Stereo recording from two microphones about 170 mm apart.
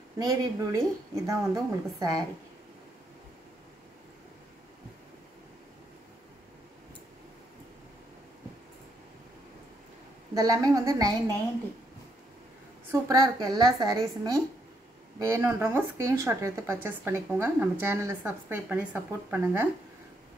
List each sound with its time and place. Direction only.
0.2 s a woman's voice: 20° right (ahead or behind)
10.3 s a woman's voice: 20° right (ahead or behind)
12.9 s a woman's voice: 20° right (ahead or behind)